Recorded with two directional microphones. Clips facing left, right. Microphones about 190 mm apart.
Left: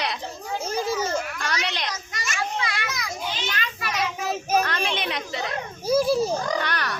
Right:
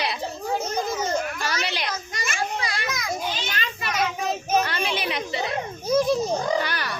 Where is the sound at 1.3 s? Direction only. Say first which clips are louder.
Right 1 dB; 5° right (ahead or behind).